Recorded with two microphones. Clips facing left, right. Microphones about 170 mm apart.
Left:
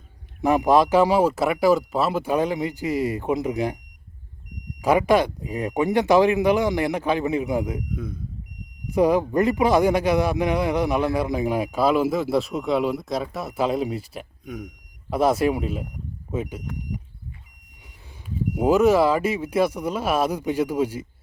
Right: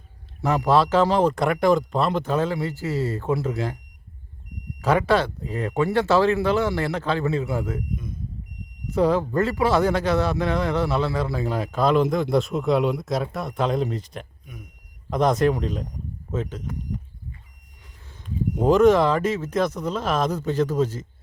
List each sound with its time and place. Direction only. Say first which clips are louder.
0.4 s a man's voice: left 2 dB; 15° left (ahead or behind)
4.8 s a man's voice: left 2 dB; 15° left (ahead or behind)
7.9 s speech: left 3 dB; 70° left (ahead or behind)
8.9 s a man's voice: left 2 dB; 15° left (ahead or behind)
14.4 s speech: left 10 dB; 90° left
15.1 s a man's voice: even; 5° left (ahead or behind)
18.5 s a man's voice: right 1 dB; 5° left (ahead or behind)